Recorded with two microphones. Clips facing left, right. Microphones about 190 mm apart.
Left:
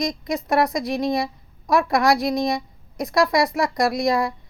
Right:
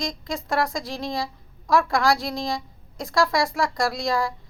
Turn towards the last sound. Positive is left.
turn(degrees=20)  # may be behind; listen again after turning